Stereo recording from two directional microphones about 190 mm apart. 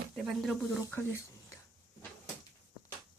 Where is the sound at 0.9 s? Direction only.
15° left (ahead or behind).